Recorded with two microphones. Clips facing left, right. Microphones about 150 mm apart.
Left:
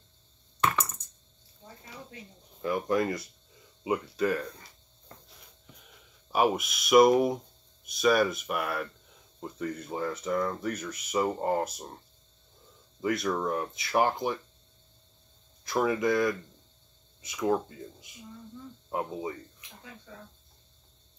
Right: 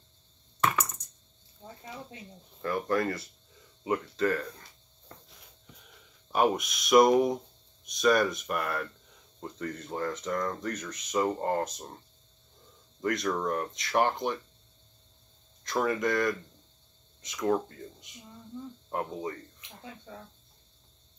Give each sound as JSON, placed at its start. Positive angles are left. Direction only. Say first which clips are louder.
{"t": 0.6, "sound": "a sound", "louder": "even", "side_deg": 0}
{"t": 2.6, "sound": "speech", "louder": "left 1 dB", "side_deg": 15}
{"t": 5.9, "sound": "speech", "louder": "even", "side_deg": 5}
{"t": 13.0, "sound": "speech", "louder": "left 1 dB", "side_deg": 5}
{"t": 15.6, "sound": "speech", "louder": "left 2 dB", "side_deg": 10}
{"t": 18.9, "sound": "speech", "louder": "left 1 dB", "side_deg": 5}